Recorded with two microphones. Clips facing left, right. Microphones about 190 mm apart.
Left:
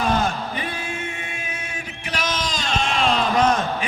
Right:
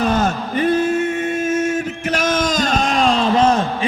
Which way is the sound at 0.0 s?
40° right (ahead or behind).